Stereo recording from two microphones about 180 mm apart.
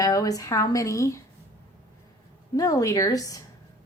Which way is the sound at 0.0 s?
20° left (ahead or behind).